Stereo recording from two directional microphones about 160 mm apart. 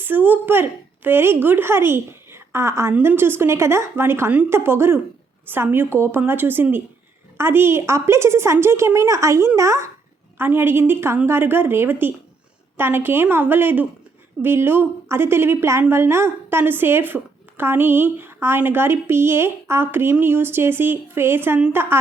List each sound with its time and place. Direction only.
0.0 s a woman's voice: 10° right (ahead or behind)